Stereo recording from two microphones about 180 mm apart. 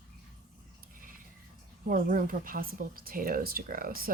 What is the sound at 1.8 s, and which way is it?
Speech, 50° right (ahead or behind).